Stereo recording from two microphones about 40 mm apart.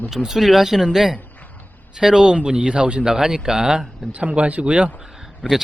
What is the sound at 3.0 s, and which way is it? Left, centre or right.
Speech, centre.